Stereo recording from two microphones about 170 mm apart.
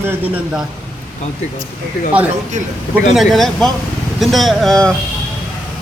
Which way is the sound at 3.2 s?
Centre (ahead or behind).